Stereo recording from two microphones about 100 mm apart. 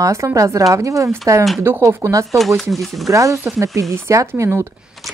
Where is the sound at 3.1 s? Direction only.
30° right (ahead or behind).